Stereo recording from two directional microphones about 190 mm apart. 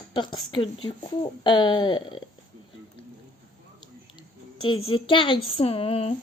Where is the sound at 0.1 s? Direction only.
25° left (ahead or behind).